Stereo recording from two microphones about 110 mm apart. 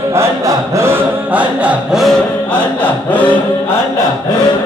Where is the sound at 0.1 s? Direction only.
30° right (ahead or behind).